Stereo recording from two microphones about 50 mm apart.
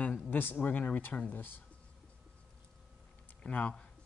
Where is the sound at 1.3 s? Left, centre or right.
Left.